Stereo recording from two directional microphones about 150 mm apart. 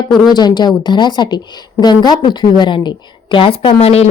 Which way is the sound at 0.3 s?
30° left (ahead or behind).